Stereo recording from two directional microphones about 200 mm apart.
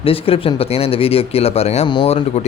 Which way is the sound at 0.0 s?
30° left (ahead or behind).